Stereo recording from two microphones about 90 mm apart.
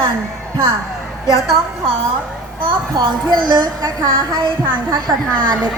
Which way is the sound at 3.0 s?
50° right (ahead or behind).